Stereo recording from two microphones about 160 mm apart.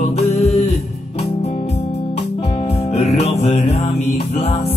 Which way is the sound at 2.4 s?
40° left (ahead or behind).